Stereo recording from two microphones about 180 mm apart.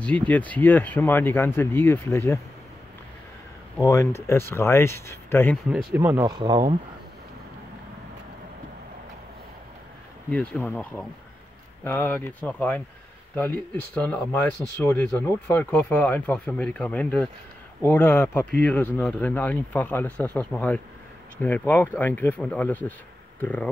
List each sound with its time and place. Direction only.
0.3 s speech: 10° left (ahead or behind)
3.8 s speech: 15° left (ahead or behind)
5.7 s speech: centre (ahead or behind)
6.2 s speech: 25° right (ahead or behind)
10.3 s speech: 10° left (ahead or behind)
13.9 s speech: 10° left (ahead or behind)